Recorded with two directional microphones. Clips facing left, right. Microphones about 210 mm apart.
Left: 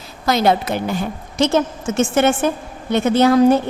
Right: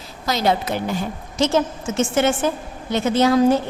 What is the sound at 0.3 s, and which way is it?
A woman's voice, 55° left (ahead or behind).